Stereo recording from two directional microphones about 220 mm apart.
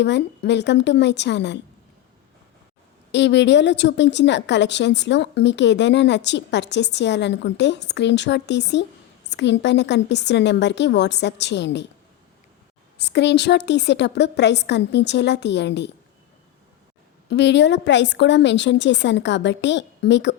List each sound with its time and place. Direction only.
0.0 s a woman's voice: 50° left (ahead or behind)
3.1 s a woman's voice: 50° left (ahead or behind)
13.0 s a woman's voice: 50° left (ahead or behind)
17.2 s a woman's voice: 50° left (ahead or behind)